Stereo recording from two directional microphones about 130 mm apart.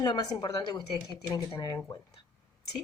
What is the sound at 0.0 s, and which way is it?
Speech, 30° left (ahead or behind).